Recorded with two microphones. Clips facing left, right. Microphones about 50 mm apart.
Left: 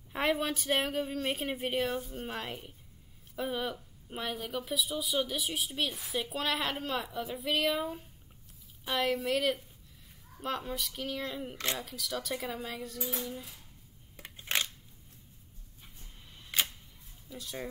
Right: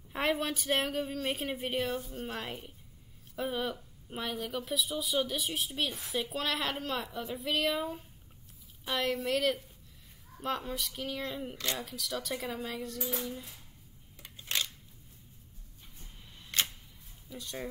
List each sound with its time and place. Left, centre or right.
0.1 s speech: centre
14.1 s scissors: left
16.5 s camera: centre
17.3 s speech: centre